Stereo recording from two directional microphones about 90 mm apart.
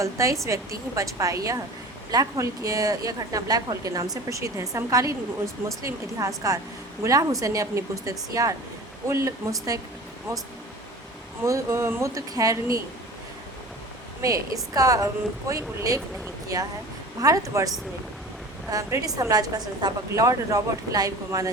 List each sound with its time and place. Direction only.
0.0 s a woman's voice: 35° right (ahead or behind)
11.4 s a woman's voice: 30° right (ahead or behind)
14.2 s a woman's voice: 40° right (ahead or behind)
18.7 s a woman's voice: 35° right (ahead or behind)